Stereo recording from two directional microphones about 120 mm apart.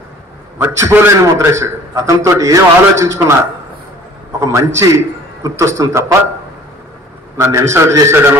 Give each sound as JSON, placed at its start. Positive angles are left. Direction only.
{"t": 0.6, "sound": "a man's voice", "side_deg": -20}
{"t": 4.4, "sound": "a man's voice", "side_deg": -25}
{"t": 7.3, "sound": "a man's voice", "side_deg": -25}